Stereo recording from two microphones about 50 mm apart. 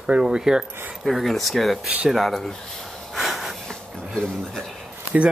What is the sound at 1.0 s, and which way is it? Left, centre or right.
Speech, centre.